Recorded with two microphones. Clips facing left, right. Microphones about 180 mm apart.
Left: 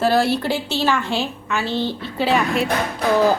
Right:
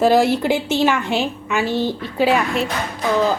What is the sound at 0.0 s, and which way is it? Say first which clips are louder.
A woman's voice: right 3 dB; 15° right (ahead or behind).